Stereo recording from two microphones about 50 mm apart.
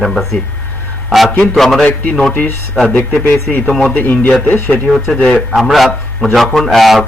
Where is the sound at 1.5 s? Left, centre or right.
Centre.